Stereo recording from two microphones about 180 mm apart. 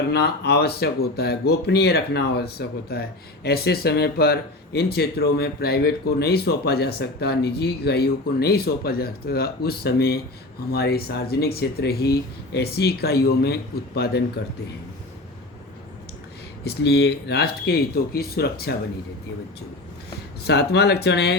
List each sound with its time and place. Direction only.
0.1 s speech: 65° left (ahead or behind)
16.6 s speech: 65° left (ahead or behind)
20.4 s speech: 65° left (ahead or behind)